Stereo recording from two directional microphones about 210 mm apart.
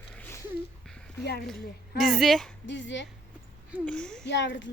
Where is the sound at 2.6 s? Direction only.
60° left (ahead or behind).